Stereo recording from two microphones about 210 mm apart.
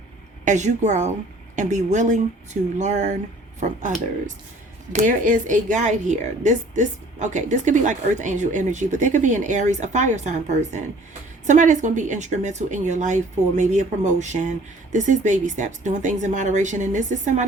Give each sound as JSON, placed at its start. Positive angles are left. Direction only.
{"t": 0.4, "sound": "speech", "side_deg": -35}
{"t": 4.9, "sound": "speech", "side_deg": -40}